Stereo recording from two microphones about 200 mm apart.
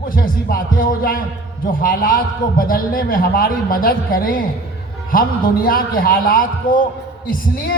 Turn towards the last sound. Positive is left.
turn(degrees=45)  # may be behind; listen again after turning